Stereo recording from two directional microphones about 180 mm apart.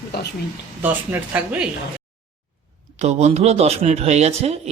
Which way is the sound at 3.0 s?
40° right (ahead or behind).